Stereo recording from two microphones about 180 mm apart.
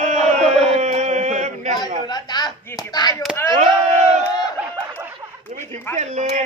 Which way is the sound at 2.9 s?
20° left (ahead or behind).